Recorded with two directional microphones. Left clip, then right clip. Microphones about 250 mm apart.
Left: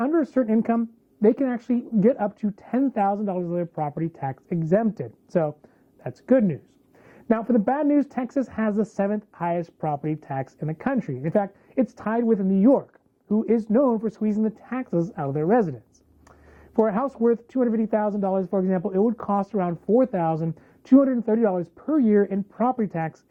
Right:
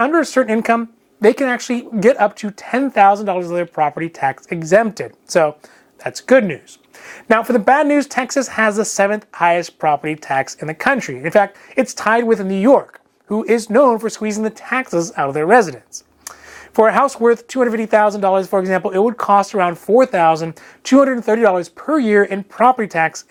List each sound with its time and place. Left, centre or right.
0.0 s speech: centre